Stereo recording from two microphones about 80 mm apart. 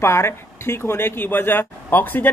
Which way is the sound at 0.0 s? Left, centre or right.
Left.